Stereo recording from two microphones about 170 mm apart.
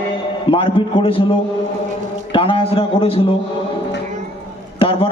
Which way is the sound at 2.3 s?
30° left (ahead or behind).